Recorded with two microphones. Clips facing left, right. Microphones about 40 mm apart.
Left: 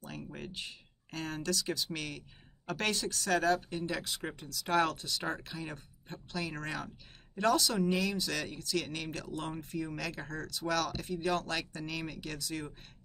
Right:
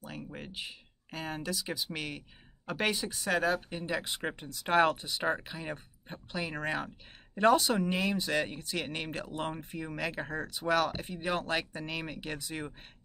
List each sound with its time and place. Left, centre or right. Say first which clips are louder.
0.0 s speech: right 1 dB; centre